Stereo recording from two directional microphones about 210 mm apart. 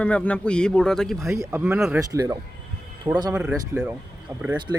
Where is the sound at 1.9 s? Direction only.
15° right (ahead or behind).